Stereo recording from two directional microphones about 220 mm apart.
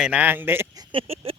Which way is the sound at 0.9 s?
25° right (ahead or behind).